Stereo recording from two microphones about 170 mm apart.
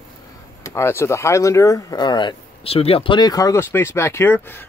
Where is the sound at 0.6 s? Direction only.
15° left (ahead or behind).